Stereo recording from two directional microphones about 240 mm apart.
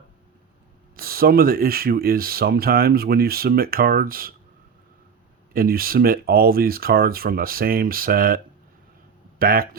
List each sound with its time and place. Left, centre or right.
0.9 s speech: right
5.5 s speech: right
9.4 s speech: right